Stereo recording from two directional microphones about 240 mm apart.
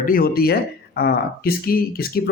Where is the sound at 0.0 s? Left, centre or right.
Left.